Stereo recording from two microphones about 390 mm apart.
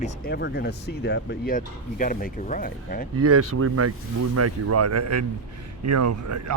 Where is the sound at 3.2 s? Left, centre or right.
Right.